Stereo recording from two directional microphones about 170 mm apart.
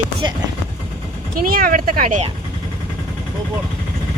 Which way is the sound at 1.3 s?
55° right (ahead or behind).